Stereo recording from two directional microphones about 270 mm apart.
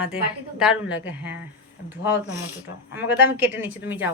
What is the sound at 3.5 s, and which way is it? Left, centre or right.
Speech, centre.